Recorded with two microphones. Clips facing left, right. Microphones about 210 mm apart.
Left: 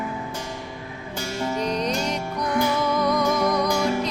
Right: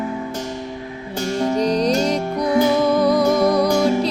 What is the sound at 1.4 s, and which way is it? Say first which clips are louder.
Music: right 7 dB; 35° right (ahead or behind).